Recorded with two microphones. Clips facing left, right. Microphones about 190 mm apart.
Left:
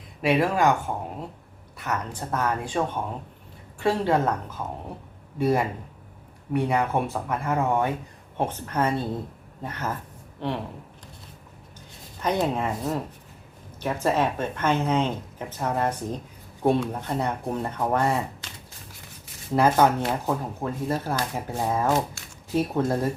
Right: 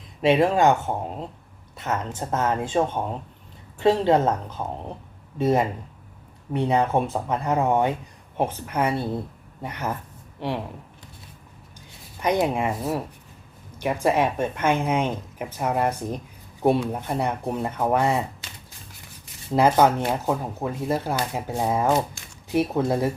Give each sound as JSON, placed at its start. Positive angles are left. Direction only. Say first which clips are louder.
{"t": 0.2, "sound": "speech", "louder": "right 3 dB", "side_deg": -25}
{"t": 12.2, "sound": "speech", "louder": "right 2 dB", "side_deg": -10}
{"t": 19.5, "sound": "speech", "louder": "right 2 dB", "side_deg": -15}